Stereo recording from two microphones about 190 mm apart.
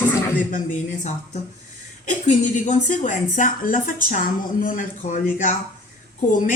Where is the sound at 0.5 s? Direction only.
40° left (ahead or behind).